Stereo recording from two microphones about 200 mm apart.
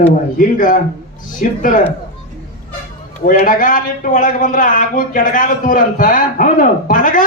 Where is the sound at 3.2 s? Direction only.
45° left (ahead or behind).